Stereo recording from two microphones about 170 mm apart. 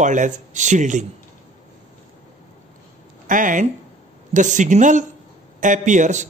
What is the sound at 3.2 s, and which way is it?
Speech, 50° right (ahead or behind).